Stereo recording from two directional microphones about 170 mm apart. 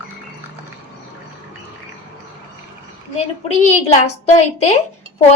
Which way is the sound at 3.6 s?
40° left (ahead or behind).